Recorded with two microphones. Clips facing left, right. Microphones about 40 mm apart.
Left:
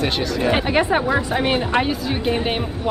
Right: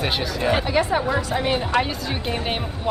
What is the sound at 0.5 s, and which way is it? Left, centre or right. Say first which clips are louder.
A woman's voice: left 2 dB; left.